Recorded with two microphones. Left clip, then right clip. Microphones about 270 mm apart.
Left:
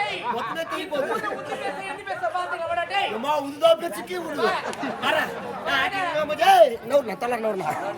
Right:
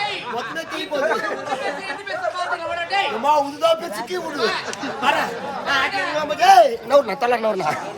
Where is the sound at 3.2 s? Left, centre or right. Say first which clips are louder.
Right 3 dB; centre.